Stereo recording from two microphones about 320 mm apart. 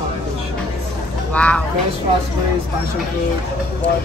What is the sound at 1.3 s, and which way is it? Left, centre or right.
Speech, centre.